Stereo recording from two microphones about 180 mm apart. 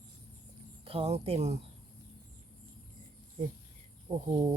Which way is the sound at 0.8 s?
35° right (ahead or behind).